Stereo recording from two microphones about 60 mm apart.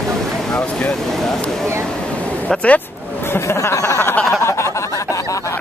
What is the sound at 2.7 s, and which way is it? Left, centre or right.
Speech, left.